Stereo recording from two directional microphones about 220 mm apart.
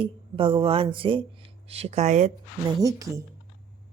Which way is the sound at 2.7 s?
15° right (ahead or behind).